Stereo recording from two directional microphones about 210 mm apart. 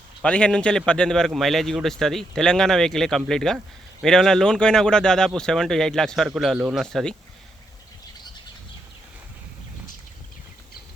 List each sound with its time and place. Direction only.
0.2 s a man's voice: 5° left (ahead or behind)